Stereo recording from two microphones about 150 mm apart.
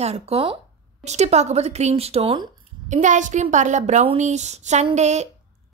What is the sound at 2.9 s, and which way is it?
Speech, 55° right (ahead or behind).